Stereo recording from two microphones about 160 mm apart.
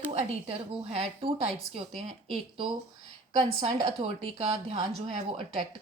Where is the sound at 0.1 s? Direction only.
40° right (ahead or behind).